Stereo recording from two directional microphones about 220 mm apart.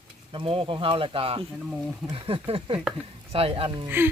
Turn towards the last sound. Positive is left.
turn(degrees=-10)  # may be behind; listen again after turning